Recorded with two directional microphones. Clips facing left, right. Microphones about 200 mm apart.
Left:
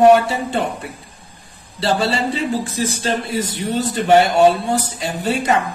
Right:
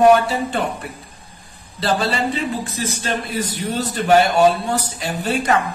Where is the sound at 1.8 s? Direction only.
25° left (ahead or behind).